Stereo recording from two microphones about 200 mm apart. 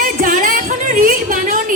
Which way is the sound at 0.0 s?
40° right (ahead or behind).